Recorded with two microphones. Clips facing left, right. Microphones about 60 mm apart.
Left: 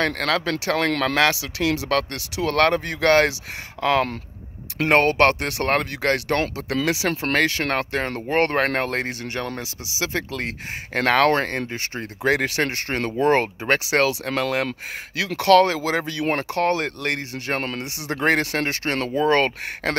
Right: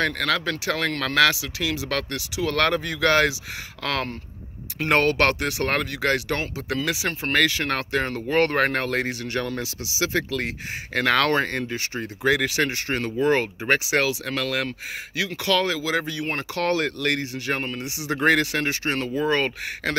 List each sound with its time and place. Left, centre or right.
0.0 s speech: left
1.4 s speech: left
1.9 s speech: left
4.8 s speech: left
6.4 s speech: left
7.4 s speech: left
12.2 s speech: left
14.7 s speech: left
16.5 s speech: left
17.6 s speech: left
17.8 s speech: left